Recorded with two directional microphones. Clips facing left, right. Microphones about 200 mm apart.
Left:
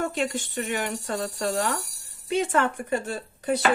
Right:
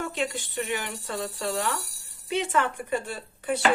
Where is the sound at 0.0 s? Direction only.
45° left (ahead or behind).